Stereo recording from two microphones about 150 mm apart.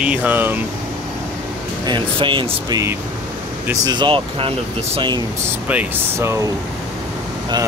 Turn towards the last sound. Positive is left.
turn(degrees=-15)  # may be behind; listen again after turning